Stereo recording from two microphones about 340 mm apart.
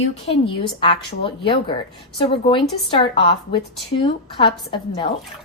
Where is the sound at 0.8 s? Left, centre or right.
Centre.